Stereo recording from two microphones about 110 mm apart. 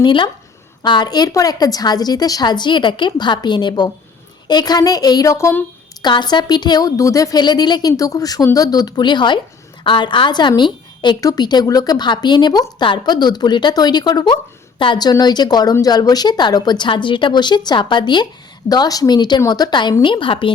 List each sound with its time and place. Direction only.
0.0 s a woman's voice: 45° left (ahead or behind); by 5.5 s 25° left (ahead or behind)
6.0 s a woman's voice: 40° left (ahead or behind)